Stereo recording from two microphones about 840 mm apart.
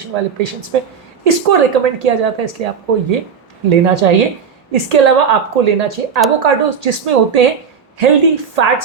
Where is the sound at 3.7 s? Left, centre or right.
Right.